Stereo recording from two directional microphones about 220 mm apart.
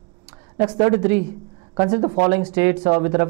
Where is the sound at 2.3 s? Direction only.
15° right (ahead or behind).